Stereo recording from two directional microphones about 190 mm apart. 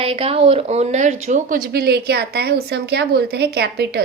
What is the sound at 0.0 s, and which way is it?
Speech, 30° right (ahead or behind).